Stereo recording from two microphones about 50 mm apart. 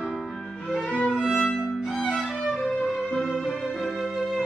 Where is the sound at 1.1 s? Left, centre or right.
Centre.